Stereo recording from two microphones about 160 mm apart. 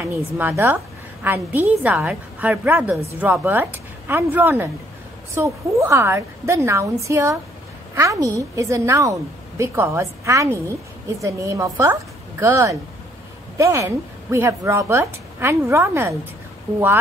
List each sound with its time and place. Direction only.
0.0 s a woman's voice: 15° right (ahead or behind)